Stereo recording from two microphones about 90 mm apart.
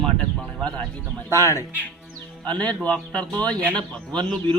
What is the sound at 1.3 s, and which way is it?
Speech, 30° left (ahead or behind).